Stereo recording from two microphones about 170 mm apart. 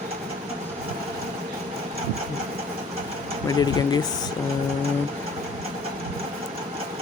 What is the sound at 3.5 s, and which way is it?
Speech, 20° left (ahead or behind).